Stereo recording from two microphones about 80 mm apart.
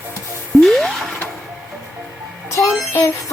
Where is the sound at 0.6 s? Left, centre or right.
Centre.